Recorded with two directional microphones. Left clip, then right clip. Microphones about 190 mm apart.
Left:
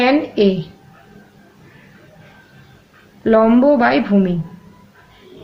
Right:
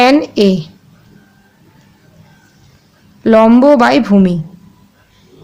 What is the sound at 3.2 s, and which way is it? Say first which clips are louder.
Speech: right 5 dB; 45° right (ahead or behind).